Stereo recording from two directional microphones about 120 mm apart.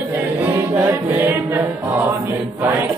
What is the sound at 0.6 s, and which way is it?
Music, 15° right (ahead or behind).